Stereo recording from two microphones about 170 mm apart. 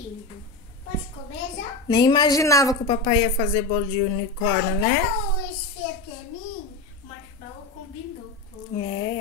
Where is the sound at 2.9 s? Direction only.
30° left (ahead or behind).